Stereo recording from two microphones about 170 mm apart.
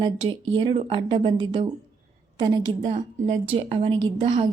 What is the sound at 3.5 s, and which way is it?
Speech, 35° right (ahead or behind).